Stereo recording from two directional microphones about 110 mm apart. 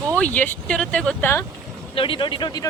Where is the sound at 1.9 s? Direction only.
55° left (ahead or behind).